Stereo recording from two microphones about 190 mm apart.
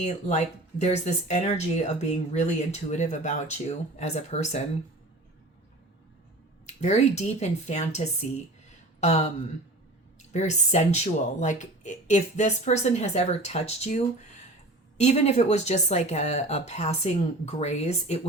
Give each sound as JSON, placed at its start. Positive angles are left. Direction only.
{"t": 0.0, "sound": "speech", "side_deg": 40}
{"t": 6.8, "sound": "speech", "side_deg": 35}
{"t": 10.3, "sound": "speech", "side_deg": 40}